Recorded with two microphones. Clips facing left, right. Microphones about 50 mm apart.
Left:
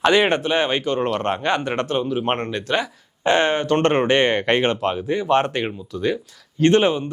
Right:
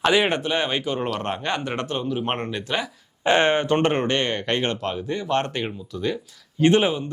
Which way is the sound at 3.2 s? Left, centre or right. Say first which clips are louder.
Left 1 dB; centre.